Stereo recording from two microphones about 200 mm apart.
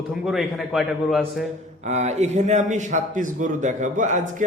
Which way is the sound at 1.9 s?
35° right (ahead or behind).